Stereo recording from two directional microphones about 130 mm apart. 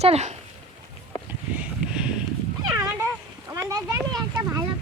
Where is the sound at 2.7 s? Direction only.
25° right (ahead or behind).